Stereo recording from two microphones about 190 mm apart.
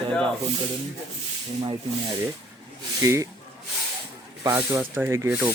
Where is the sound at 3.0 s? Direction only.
15° right (ahead or behind).